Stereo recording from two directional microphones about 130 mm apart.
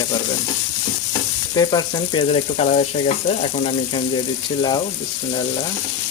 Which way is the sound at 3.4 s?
45° left (ahead or behind).